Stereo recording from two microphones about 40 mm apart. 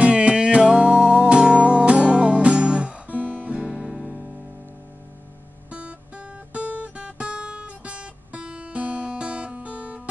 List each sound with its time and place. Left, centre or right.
0.0 s music: right
3.7 s music: centre
5.7 s guitar: right